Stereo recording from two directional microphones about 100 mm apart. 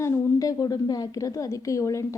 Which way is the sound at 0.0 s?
35° left (ahead or behind).